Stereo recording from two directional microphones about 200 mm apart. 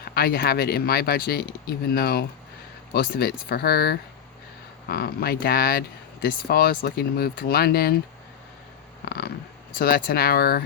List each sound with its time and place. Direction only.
0.0 s speech: 50° left (ahead or behind)
9.0 s cat: 50° left (ahead or behind)
9.7 s speech: 50° left (ahead or behind)